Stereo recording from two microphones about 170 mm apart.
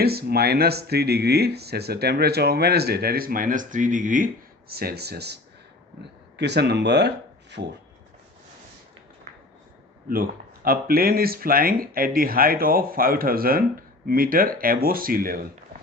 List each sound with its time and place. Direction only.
0.0 s speech: 65° right (ahead or behind); by 4.3 s 50° right (ahead or behind)
4.7 s speech: 65° right (ahead or behind); by 7.7 s 90° right
10.1 s speech: 60° right (ahead or behind)